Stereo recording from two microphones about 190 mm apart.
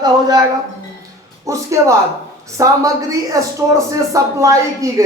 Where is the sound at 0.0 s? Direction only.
20° right (ahead or behind).